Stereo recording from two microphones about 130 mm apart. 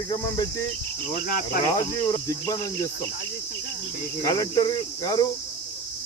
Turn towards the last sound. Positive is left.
turn(degrees=30)  # may be behind; listen again after turning